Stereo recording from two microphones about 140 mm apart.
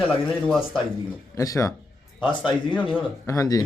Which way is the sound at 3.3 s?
25° left (ahead or behind).